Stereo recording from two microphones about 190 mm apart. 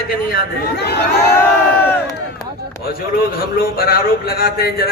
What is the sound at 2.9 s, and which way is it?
A man's voice, 50° left (ahead or behind).